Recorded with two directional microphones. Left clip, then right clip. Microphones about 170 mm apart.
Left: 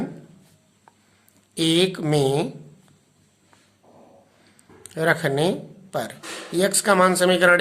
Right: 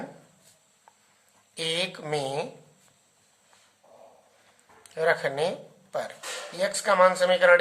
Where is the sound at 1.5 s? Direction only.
25° left (ahead or behind).